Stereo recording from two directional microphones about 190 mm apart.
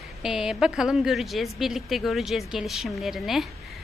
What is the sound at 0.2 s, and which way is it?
A woman's voice, 5° right (ahead or behind).